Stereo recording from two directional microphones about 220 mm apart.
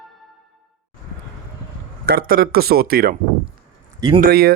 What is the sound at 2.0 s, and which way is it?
Speech, 45° right (ahead or behind).